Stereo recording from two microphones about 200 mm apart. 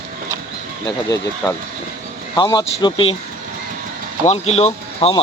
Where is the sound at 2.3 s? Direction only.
20° left (ahead or behind).